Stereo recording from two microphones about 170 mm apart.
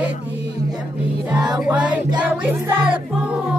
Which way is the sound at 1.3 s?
25° right (ahead or behind).